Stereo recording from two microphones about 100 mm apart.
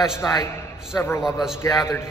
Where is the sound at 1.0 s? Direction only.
30° left (ahead or behind).